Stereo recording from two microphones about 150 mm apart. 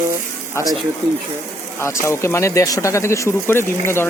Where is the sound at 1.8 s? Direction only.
20° left (ahead or behind).